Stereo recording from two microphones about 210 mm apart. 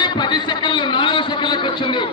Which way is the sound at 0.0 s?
20° left (ahead or behind).